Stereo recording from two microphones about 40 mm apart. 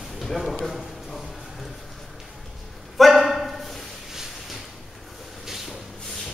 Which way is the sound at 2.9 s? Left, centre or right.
Centre.